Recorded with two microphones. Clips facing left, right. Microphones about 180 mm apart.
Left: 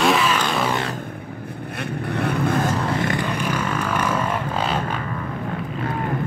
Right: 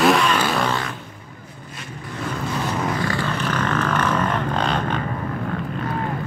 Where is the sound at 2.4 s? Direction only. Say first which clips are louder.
Left 4 dB; 50° left (ahead or behind).